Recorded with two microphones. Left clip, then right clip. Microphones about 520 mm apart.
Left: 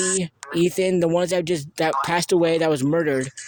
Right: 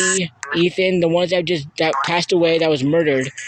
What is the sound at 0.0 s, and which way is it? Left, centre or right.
Speech, left.